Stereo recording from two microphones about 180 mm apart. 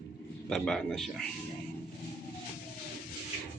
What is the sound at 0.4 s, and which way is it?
Speech, 5° left (ahead or behind).